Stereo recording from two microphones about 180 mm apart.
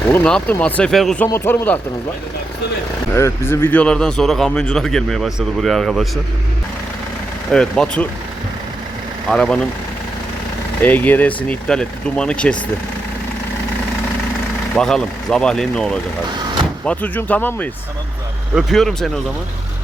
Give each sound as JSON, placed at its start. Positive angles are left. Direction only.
{"t": 0.1, "sound": "speech", "side_deg": 5}
{"t": 3.2, "sound": "a man's voice", "side_deg": 15}
{"t": 7.5, "sound": "a man's voice", "side_deg": 5}
{"t": 9.3, "sound": "a man's voice", "side_deg": 5}
{"t": 10.8, "sound": "a man's voice", "side_deg": 10}
{"t": 14.8, "sound": "a man's voice", "side_deg": 5}